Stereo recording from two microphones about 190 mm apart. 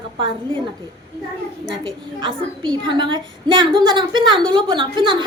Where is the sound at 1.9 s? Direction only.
25° right (ahead or behind).